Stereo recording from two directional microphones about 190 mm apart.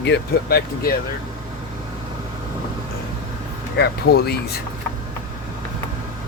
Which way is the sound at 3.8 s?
60° left (ahead or behind).